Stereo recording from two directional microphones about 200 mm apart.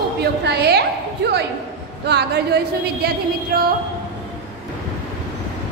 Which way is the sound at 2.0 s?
55° right (ahead or behind).